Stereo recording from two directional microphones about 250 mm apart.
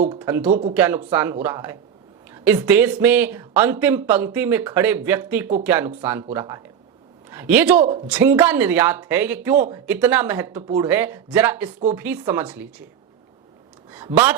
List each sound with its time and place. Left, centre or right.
0.2 s a man's voice: centre
7.8 s speech: right
8.1 s speech: centre
13.9 s speech: centre